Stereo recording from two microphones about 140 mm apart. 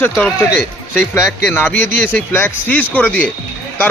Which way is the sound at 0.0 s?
10° left (ahead or behind).